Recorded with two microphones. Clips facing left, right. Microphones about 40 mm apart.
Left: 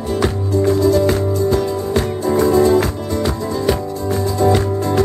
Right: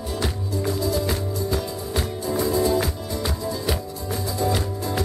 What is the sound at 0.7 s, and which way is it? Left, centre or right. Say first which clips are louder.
Music: left 11 dB; left.